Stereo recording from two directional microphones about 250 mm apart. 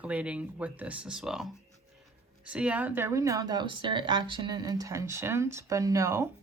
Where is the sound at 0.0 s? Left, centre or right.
Centre.